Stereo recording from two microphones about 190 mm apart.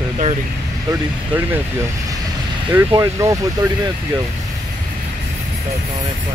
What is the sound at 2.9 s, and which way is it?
Speech, 15° right (ahead or behind).